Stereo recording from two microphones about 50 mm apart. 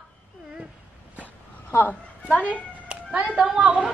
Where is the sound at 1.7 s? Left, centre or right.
Left.